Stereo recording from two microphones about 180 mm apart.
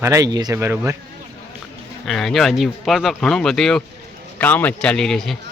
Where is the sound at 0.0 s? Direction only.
20° right (ahead or behind).